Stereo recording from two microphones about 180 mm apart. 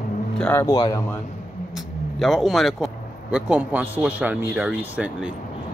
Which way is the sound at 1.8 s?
Centre (ahead or behind).